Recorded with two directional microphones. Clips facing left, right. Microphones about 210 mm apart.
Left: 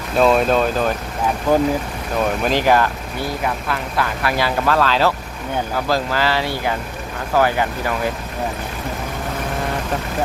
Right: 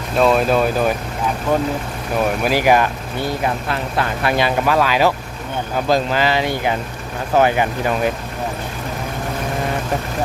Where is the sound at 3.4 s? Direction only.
25° right (ahead or behind).